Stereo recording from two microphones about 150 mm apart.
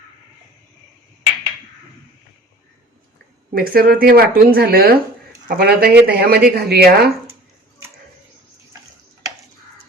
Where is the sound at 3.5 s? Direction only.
80° right.